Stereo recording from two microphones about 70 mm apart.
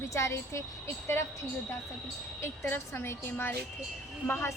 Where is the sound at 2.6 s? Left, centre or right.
Left.